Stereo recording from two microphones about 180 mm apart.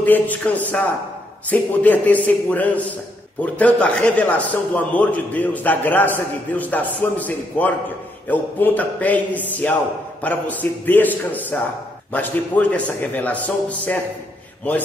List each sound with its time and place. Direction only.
0.0 s a man's voice: 10° left (ahead or behind)